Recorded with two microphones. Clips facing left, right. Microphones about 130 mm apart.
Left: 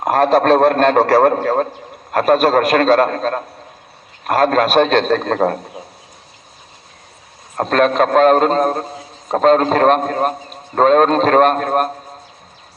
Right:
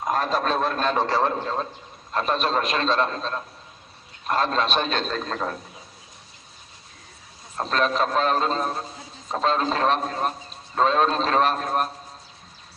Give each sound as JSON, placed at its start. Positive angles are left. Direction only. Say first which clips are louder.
{"t": 0.0, "sound": "a man's voice", "louder": "left 11 dB", "side_deg": 60}
{"t": 7.5, "sound": "a man's voice", "louder": "left 9 dB", "side_deg": 55}